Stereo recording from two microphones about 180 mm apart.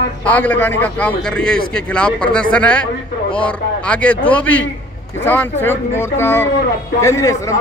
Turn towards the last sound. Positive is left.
turn(degrees=15)  # may be behind; listen again after turning